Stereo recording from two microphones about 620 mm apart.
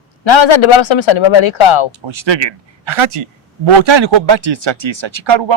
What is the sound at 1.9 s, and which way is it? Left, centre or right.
Speech, right.